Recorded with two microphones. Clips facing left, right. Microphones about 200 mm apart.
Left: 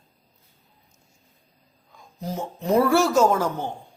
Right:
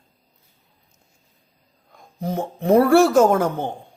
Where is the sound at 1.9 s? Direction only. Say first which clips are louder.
Right 5 dB; 55° right (ahead or behind).